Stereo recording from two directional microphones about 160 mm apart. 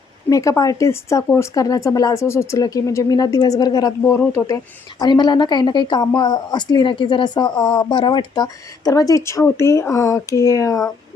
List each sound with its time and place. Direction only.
0.3 s speech: 20° left (ahead or behind)